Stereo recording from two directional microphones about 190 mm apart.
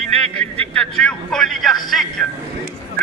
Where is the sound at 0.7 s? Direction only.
5° left (ahead or behind).